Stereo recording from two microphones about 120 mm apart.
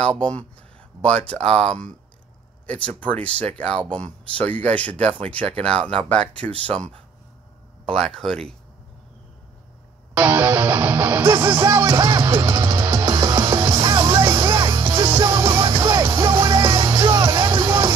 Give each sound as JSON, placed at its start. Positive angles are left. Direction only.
{"t": 0.0, "sound": "speech", "side_deg": 10}
{"t": 1.4, "sound": "speech", "side_deg": -60}
{"t": 3.0, "sound": "speech", "side_deg": 10}
{"t": 7.8, "sound": "speech", "side_deg": 5}
{"t": 10.1, "sound": "music", "side_deg": -15}